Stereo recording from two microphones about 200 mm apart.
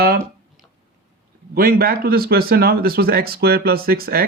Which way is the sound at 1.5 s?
50° right (ahead or behind).